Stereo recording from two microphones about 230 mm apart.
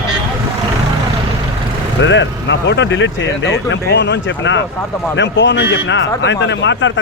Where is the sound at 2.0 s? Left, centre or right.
Left.